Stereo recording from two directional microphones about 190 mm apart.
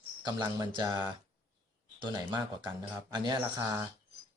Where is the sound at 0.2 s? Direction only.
20° right (ahead or behind).